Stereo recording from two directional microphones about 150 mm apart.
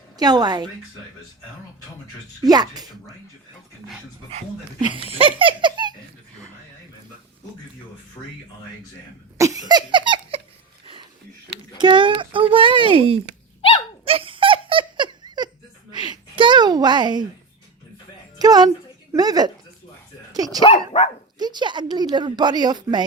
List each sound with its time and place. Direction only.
0.2 s a woman's voice: 25° right (ahead or behind)
2.4 s a woman's voice: 25° right (ahead or behind)
4.9 s laughter: 40° right (ahead or behind)
9.4 s laughter: 25° right (ahead or behind)
11.8 s speech: 30° right (ahead or behind)
13.6 s dog: 35° left (ahead or behind)
14.0 s laughter: 40° right (ahead or behind)
15.9 s a sound: 30° right (ahead or behind)
18.3 s a woman's voice: 25° right (ahead or behind)
20.3 s dog: 25° right (ahead or behind)
20.6 s speech: 40° left (ahead or behind)
21.3 s a woman's voice: 30° right (ahead or behind)